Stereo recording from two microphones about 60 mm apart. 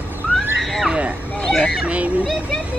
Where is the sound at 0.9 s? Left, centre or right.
Right.